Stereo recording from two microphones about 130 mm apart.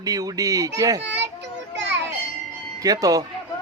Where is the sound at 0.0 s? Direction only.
30° right (ahead or behind).